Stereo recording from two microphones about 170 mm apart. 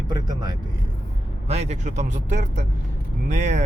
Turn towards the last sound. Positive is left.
turn(degrees=-45)  # may be behind; listen again after turning